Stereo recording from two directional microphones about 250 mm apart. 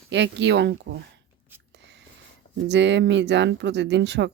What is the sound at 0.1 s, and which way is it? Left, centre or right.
Speech, right.